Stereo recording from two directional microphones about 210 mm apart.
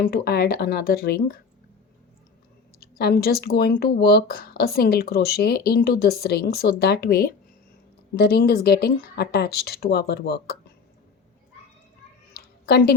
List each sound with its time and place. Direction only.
0.0 s speech: 45° left (ahead or behind)
3.0 s speech: 50° left (ahead or behind)
12.3 s a sound: 50° left (ahead or behind)